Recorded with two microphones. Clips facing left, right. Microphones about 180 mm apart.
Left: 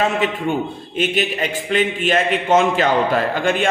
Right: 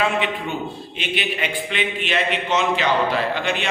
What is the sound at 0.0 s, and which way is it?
A man's voice, 45° left (ahead or behind).